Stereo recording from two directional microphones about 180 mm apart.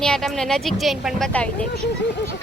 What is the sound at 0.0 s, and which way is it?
Speech, 5° left (ahead or behind).